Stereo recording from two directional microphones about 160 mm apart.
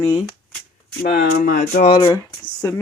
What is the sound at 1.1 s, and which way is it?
Speech, 55° left (ahead or behind).